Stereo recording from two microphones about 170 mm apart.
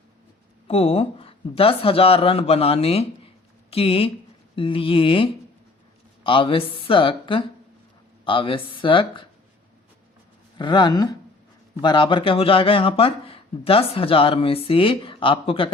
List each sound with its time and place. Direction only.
0.7 s speech: 35° left (ahead or behind)
10.6 s speech: 25° left (ahead or behind)